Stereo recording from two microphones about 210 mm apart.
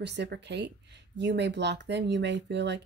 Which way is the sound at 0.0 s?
55° right (ahead or behind).